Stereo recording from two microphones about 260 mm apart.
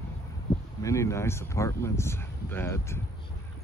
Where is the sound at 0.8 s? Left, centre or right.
Centre.